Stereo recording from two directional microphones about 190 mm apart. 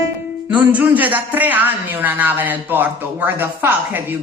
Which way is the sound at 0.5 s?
10° right (ahead or behind).